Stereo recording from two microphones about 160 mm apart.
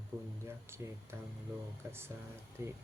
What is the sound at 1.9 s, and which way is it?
Speech, 15° right (ahead or behind).